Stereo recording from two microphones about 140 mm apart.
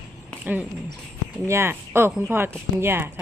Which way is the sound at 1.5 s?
20° right (ahead or behind).